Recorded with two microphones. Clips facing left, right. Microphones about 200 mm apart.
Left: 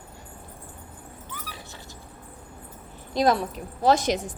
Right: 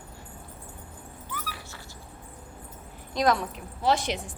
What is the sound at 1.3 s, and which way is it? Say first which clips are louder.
Dog: right 3 dB; 20° left (ahead or behind).